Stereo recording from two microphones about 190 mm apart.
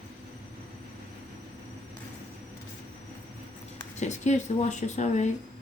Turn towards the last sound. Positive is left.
turn(degrees=40)  # may be behind; listen again after turning